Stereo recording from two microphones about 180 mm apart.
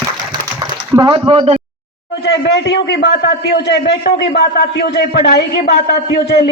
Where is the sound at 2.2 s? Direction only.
70° left (ahead or behind).